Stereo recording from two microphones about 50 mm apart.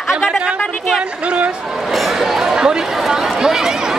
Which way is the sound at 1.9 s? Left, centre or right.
Centre.